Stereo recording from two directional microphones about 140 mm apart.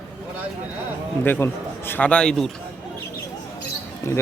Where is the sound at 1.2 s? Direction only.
15° left (ahead or behind).